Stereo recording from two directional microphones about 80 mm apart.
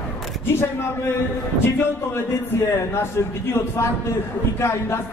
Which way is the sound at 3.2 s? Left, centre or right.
Left.